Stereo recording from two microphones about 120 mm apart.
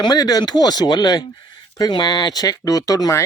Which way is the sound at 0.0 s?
30° left (ahead or behind).